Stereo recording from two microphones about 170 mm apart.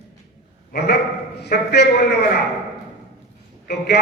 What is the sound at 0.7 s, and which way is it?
Dog, 70° left (ahead or behind).